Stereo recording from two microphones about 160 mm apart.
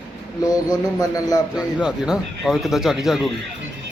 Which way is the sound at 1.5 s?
5° right (ahead or behind).